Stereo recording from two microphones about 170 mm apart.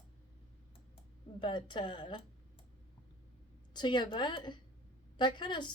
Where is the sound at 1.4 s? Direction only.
25° left (ahead or behind).